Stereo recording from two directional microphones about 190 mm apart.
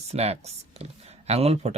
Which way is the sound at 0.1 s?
35° right (ahead or behind).